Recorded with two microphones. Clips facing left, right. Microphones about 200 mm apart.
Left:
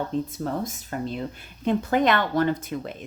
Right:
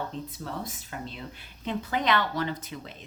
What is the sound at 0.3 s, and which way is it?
A woman's voice, 45° left (ahead or behind).